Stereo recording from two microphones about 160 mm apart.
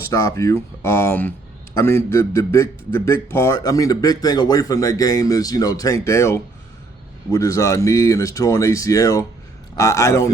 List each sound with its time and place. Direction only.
0.1 s a man's voice: 20° left (ahead or behind)